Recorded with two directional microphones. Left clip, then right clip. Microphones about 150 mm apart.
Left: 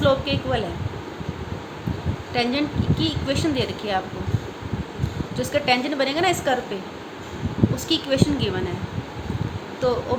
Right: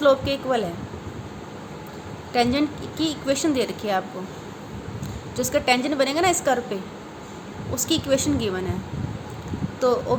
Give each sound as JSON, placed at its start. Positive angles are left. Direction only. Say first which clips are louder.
{"t": 0.0, "sound": "a woman's voice", "louder": "right 2 dB", "side_deg": -40}
{"t": 2.3, "sound": "a woman's voice", "louder": "right 2 dB", "side_deg": -40}
{"t": 5.4, "sound": "a woman's voice", "louder": "even", "side_deg": -40}
{"t": 7.8, "sound": "a woman's voice", "louder": "right 2 dB", "side_deg": -40}
{"t": 10.1, "sound": "speech", "louder": "right 2 dB", "side_deg": -40}